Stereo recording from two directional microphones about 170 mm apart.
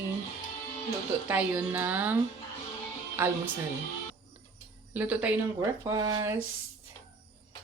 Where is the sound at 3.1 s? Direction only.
15° right (ahead or behind).